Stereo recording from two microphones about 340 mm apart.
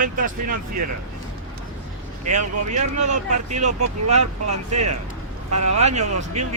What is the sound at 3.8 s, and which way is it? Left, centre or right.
Speech, right.